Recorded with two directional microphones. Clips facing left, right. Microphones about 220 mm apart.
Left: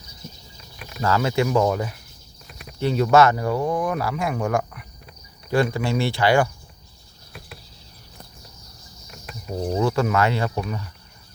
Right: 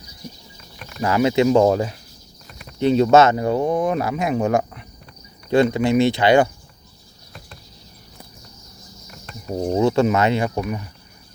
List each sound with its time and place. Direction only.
1.0 s speech: 15° right (ahead or behind)
9.6 s speech: 25° right (ahead or behind)